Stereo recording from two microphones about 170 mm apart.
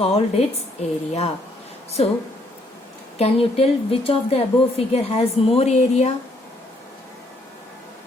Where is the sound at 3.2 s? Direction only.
35° left (ahead or behind).